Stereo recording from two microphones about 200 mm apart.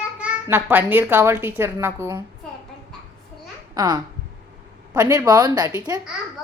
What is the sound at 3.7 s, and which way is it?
A child's voice, 20° right (ahead or behind).